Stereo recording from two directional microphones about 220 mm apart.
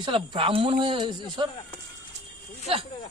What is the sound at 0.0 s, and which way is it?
Speech, 20° right (ahead or behind).